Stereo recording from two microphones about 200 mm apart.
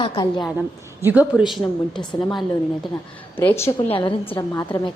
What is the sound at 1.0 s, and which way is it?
A woman's voice, 10° right (ahead or behind).